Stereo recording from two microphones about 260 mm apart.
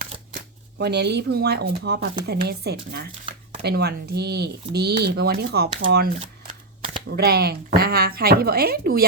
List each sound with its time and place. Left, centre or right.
0.8 s speech: right
6.1 s camera: right
7.1 s speech: right